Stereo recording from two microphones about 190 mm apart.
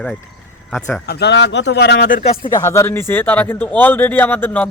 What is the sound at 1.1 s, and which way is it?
Speech, 60° left (ahead or behind).